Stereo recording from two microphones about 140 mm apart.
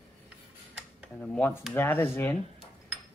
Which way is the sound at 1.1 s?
5° left (ahead or behind).